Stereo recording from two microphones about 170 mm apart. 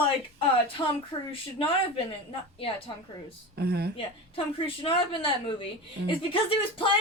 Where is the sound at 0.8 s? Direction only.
25° left (ahead or behind).